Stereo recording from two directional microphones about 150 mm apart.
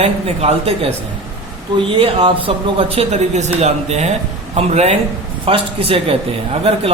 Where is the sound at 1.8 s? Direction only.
35° right (ahead or behind).